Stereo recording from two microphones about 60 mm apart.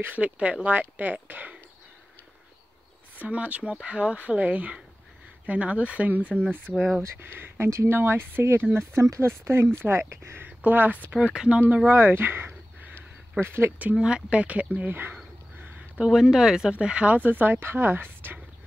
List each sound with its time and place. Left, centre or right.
0.1 s speech: right
3.2 s speech: right
6.7 s speech: centre
7.0 s speech: right
8.7 s speech: right
10.4 s speech: right
11.3 s speech: centre
11.9 s speech: right
14.0 s speech: centre
14.8 s speech: right
16.1 s speech: centre; by 18.4 s right